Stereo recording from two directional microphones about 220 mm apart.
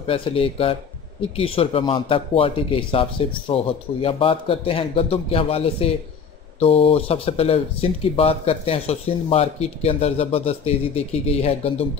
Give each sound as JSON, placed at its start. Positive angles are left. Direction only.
{"t": 0.0, "sound": "speech", "side_deg": 25}